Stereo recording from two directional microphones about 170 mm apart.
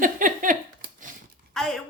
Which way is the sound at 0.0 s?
50° right (ahead or behind).